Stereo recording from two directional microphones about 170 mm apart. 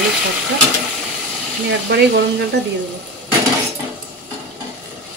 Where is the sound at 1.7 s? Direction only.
90° right.